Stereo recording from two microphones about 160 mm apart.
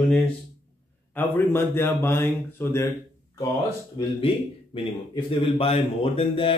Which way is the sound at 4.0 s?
30° left (ahead or behind).